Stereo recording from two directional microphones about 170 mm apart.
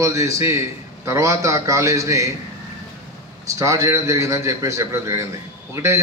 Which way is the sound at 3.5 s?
20° right (ahead or behind).